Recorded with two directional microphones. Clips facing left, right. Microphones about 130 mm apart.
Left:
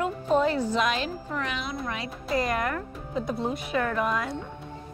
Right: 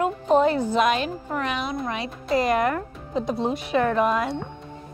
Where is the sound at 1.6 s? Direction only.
20° right (ahead or behind).